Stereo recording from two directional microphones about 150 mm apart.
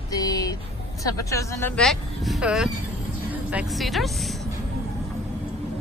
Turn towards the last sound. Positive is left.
turn(degrees=0)  # may be behind; listen again after turning